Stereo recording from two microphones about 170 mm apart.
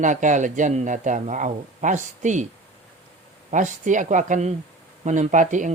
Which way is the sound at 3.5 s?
45° right (ahead or behind).